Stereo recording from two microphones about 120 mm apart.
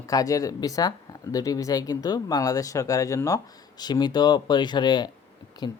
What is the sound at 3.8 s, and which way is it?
Speech, 35° left (ahead or behind).